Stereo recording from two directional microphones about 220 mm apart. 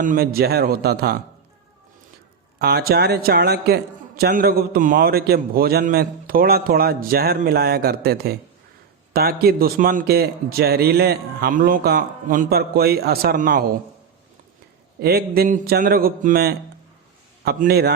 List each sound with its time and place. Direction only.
0.0 s a man's voice: 40° right (ahead or behind)
2.6 s a man's voice: 45° right (ahead or behind)
15.0 s a man's voice: 45° right (ahead or behind)